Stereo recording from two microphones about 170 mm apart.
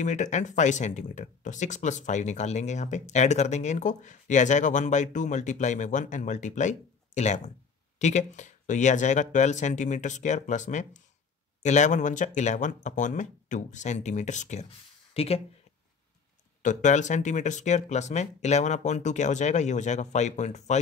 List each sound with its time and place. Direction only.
0.0 s speech: 45° left (ahead or behind)
16.6 s speech: 45° left (ahead or behind)